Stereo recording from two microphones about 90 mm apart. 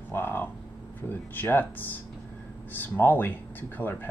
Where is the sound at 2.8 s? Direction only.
20° left (ahead or behind).